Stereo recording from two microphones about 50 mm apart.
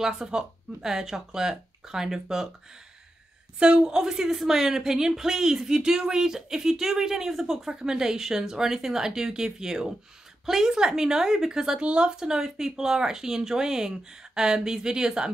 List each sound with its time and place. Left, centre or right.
0.0 s a woman's voice: centre
3.5 s a woman's voice: centre